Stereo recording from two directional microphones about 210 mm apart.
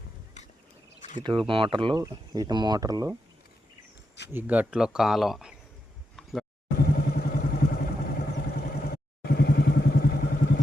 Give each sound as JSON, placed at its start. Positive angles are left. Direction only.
{"t": 1.5, "sound": "speech", "side_deg": -25}
{"t": 4.3, "sound": "speech", "side_deg": -10}
{"t": 6.7, "sound": "vehicle", "side_deg": 45}